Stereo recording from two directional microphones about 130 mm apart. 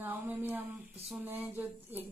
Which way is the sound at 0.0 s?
15° right (ahead or behind).